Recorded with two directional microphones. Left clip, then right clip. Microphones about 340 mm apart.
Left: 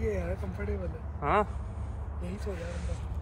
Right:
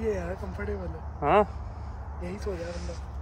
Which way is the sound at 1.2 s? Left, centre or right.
Centre.